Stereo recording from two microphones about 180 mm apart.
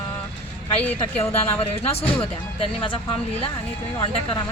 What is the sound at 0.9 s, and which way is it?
A woman's voice, 35° left (ahead or behind).